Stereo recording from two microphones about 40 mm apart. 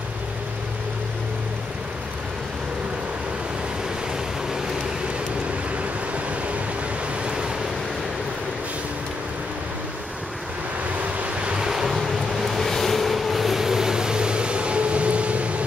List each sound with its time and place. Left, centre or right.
7.2 s waves: right
11.4 s waves: centre